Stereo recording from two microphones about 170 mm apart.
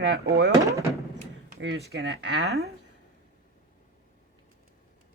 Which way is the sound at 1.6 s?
80° right.